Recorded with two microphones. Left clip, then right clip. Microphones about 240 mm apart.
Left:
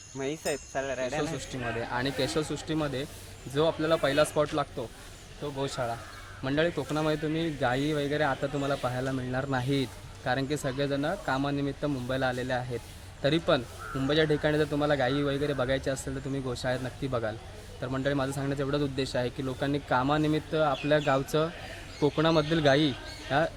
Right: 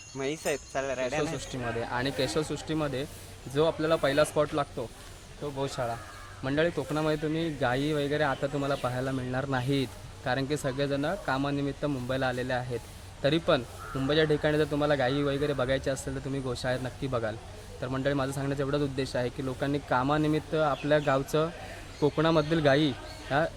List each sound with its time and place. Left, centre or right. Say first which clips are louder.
0.5 s jingle bell: right 1 dB; right
1.2 s a man's voice: right 1 dB; centre